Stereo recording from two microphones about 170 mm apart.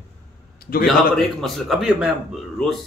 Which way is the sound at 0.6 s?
60° left (ahead or behind).